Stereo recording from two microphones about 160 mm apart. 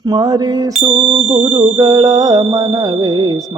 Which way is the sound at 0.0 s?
25° right (ahead or behind).